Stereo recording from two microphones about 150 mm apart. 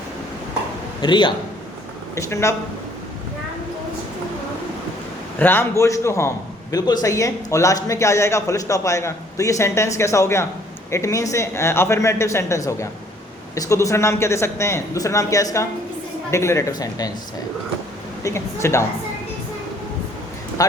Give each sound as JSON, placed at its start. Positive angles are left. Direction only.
{"t": 1.0, "sound": "a man's voice", "side_deg": 30}
{"t": 2.1, "sound": "a man's voice", "side_deg": 20}
{"t": 5.4, "sound": "a man's voice", "side_deg": 15}
{"t": 18.2, "sound": "a man's voice", "side_deg": 20}
{"t": 20.6, "sound": "a man's voice", "side_deg": 25}